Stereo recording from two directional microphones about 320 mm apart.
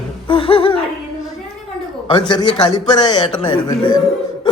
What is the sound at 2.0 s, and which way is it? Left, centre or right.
A man's voice, centre.